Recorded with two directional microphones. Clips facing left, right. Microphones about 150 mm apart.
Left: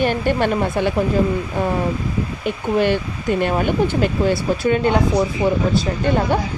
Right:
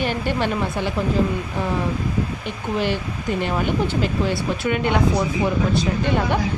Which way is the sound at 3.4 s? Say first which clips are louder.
Left 4 dB; 55° left (ahead or behind).